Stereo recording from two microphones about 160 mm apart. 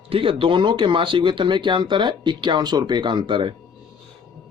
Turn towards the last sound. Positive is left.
turn(degrees=-30)  # may be behind; listen again after turning